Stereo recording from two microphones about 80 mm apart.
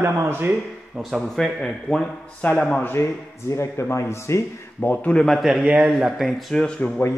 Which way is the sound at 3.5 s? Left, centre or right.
Left.